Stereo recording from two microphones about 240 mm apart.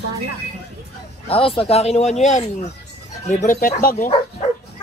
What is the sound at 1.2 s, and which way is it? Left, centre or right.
Speech, left.